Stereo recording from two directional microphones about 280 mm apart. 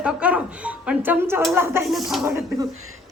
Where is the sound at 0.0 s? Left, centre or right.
Centre.